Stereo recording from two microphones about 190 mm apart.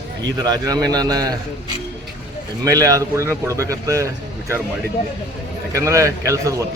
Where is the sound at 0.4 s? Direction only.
20° right (ahead or behind).